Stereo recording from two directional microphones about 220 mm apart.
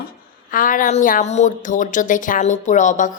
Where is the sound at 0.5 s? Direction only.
40° left (ahead or behind).